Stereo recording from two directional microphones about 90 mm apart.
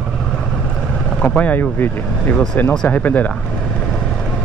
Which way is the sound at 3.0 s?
20° left (ahead or behind).